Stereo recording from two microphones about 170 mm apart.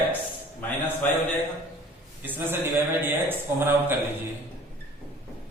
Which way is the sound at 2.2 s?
10° right (ahead or behind).